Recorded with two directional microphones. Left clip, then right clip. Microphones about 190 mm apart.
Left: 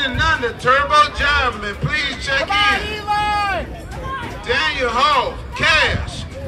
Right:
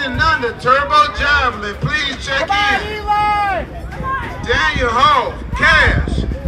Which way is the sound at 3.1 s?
30° right (ahead or behind).